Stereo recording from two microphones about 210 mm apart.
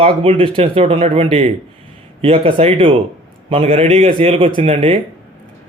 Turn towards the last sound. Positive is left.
turn(degrees=-25)  # may be behind; listen again after turning